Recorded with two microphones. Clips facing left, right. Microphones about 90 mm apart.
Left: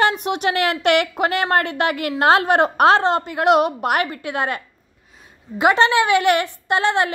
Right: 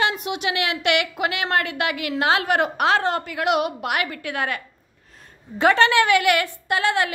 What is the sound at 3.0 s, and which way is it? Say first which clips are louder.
A woman's voice: left 4 dB; 25° left (ahead or behind).